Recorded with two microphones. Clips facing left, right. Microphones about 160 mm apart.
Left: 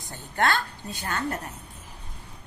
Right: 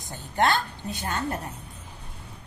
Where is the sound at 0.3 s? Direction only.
20° right (ahead or behind).